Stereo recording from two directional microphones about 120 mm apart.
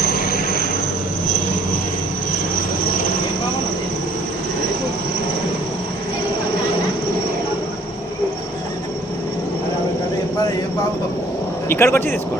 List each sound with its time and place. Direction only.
11.7 s speech: 20° left (ahead or behind)